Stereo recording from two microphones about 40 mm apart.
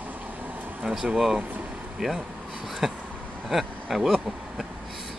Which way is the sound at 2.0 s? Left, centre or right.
Centre.